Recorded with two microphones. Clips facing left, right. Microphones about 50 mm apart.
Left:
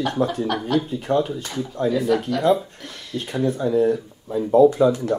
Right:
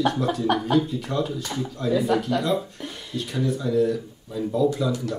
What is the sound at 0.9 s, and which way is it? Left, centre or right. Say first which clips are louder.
Speech: left 5 dB; left.